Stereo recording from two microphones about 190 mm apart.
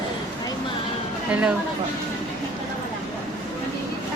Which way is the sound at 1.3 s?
5° right (ahead or behind).